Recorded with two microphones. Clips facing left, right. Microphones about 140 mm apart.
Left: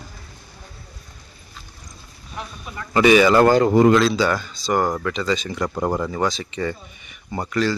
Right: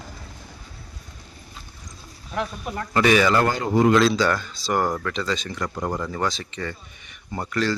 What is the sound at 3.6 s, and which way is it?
Speech, 80° left.